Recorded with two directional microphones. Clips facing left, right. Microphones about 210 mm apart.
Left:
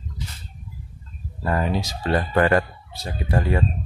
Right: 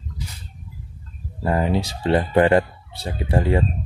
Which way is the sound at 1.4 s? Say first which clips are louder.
Right 3 dB; 20° right (ahead or behind).